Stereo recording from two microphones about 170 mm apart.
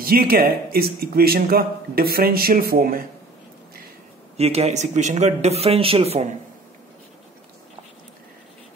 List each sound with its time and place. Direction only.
0.0 s a man's voice: 60° right (ahead or behind)
4.4 s speech: 40° right (ahead or behind)